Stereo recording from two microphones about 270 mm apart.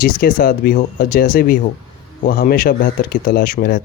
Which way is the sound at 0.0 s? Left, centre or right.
Left.